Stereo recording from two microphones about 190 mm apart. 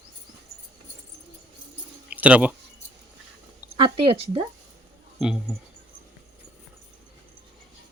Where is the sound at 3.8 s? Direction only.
30° right (ahead or behind).